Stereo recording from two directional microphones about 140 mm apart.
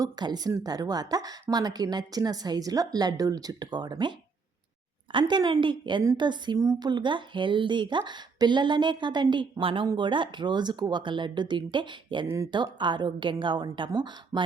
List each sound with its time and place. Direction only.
0.0 s a woman's voice: 30° right (ahead or behind)
5.1 s a woman's voice: 35° right (ahead or behind)